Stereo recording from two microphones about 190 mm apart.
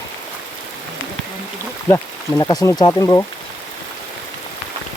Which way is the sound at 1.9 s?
15° left (ahead or behind).